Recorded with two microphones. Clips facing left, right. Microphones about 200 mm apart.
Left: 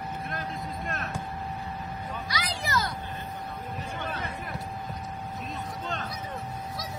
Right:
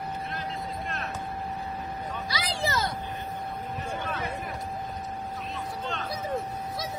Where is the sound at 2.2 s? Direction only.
25° right (ahead or behind).